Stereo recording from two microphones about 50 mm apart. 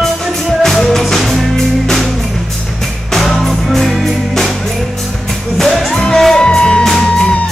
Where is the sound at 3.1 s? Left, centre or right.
Centre.